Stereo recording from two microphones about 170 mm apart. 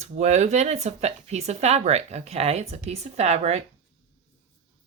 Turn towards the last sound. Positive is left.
turn(degrees=-40)  # may be behind; listen again after turning